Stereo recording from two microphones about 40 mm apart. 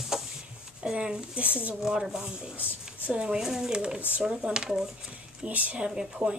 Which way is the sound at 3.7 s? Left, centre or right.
Right.